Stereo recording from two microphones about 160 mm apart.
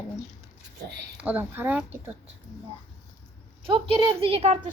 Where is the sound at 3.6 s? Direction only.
35° right (ahead or behind).